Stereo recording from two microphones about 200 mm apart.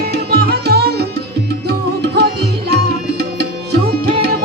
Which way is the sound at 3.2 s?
55° right (ahead or behind).